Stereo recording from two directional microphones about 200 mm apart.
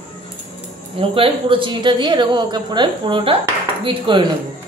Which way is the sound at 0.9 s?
25° right (ahead or behind).